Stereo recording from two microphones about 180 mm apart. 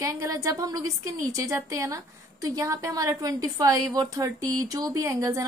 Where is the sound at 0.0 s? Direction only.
20° right (ahead or behind).